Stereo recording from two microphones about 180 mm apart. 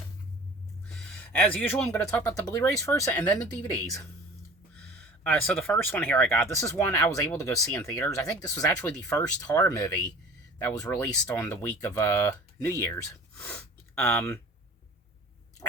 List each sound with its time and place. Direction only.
0.9 s a sound: 5° left (ahead or behind)
1.9 s speech: 15° left (ahead or behind)
4.7 s speech: 5° left (ahead or behind)